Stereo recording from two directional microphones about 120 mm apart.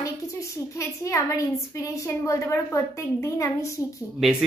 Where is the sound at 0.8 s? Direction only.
25° left (ahead or behind).